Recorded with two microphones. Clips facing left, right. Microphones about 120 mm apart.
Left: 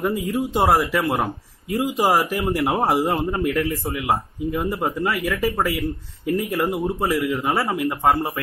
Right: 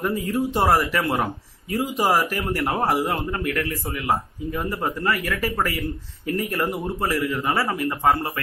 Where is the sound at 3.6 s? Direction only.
Centre (ahead or behind).